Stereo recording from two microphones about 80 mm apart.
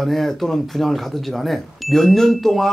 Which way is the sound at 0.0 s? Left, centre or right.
Centre.